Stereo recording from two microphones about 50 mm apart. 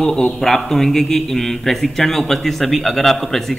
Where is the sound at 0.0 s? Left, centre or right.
Centre.